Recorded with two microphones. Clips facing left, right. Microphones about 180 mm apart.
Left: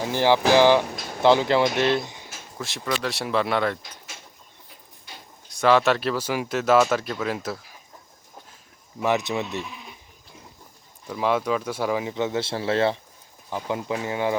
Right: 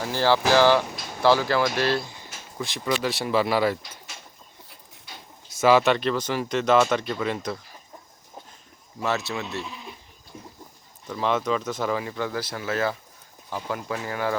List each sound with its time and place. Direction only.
0.0 s speech: 15° left (ahead or behind)
2.6 s speech: centre (ahead or behind)
5.5 s speech: 5° right (ahead or behind)
9.0 s speech: 15° left (ahead or behind)
11.1 s speech: 10° left (ahead or behind)